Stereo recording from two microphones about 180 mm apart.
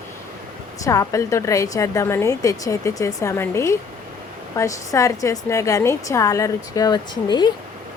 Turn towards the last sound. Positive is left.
turn(degrees=25)  # may be behind; listen again after turning